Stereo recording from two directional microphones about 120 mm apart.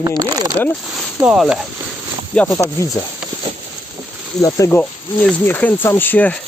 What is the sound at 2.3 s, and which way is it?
Speech, 10° left (ahead or behind).